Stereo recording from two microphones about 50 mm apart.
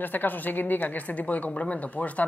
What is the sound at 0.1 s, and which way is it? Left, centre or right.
Speech, left.